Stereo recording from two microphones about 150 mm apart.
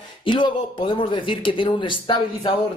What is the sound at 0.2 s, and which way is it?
Speech, 35° left (ahead or behind).